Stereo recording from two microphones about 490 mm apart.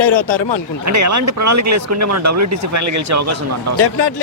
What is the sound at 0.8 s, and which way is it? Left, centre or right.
Speech, right.